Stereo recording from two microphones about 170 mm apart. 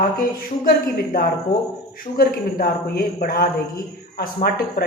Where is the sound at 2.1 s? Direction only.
60° left (ahead or behind).